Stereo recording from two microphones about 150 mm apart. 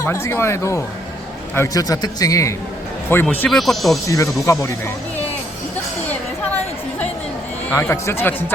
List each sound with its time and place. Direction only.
0.0 s a man's voice: 20° left (ahead or behind); by 3.9 s centre (ahead or behind)
4.0 s a man's voice: 20° left (ahead or behind)
7.7 s speech: 15° left (ahead or behind)